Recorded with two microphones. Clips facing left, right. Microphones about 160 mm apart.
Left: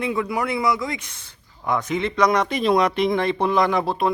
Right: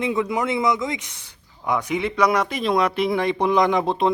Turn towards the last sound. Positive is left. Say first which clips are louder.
# right 1 dB
turn(degrees=-20)  # may be behind; listen again after turning